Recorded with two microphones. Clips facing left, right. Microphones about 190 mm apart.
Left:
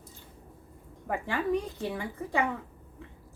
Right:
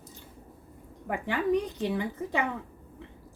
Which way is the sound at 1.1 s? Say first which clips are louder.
Right 2 dB; 15° right (ahead or behind).